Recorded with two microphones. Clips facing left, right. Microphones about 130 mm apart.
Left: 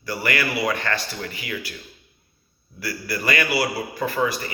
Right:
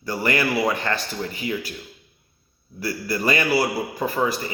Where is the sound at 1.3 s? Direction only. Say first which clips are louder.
Right 4 dB; 40° right (ahead or behind).